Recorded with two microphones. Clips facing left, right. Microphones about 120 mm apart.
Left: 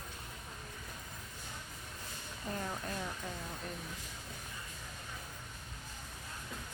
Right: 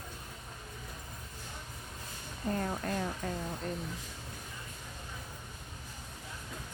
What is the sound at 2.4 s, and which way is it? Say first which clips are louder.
Speech: right 6 dB; 35° right (ahead or behind).